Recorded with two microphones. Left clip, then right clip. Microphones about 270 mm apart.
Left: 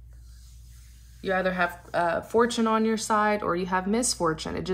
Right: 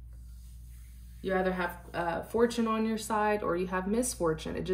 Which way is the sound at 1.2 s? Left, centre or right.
Centre.